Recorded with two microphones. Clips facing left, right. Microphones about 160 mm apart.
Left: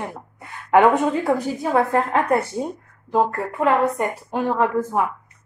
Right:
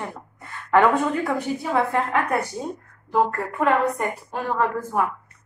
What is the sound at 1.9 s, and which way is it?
Speech, 35° left (ahead or behind).